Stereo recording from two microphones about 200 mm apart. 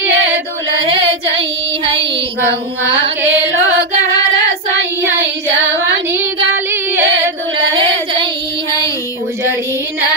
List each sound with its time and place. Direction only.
0.0 s a sound: 70° right (ahead or behind)
6.1 s child singing: 10° right (ahead or behind)
7.7 s child singing: 25° right (ahead or behind)